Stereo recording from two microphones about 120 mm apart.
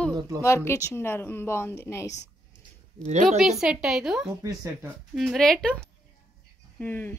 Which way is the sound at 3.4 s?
5° right (ahead or behind).